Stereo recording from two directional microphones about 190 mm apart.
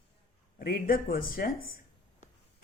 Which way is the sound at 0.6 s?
50° left (ahead or behind).